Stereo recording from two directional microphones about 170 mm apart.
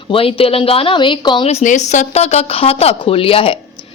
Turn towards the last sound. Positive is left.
turn(degrees=35)  # may be behind; listen again after turning